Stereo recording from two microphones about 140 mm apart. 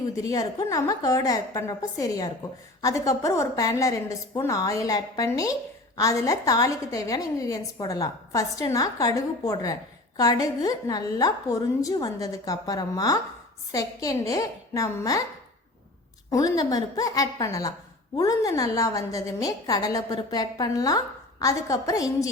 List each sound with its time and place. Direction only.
0.2 s a woman's voice: 25° left (ahead or behind)
16.3 s a woman's voice: 25° left (ahead or behind)